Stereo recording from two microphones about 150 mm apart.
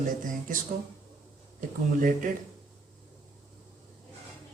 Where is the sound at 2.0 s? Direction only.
60° right (ahead or behind).